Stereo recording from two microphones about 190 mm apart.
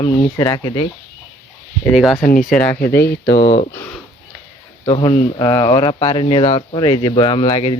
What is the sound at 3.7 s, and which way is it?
Speech, 10° left (ahead or behind).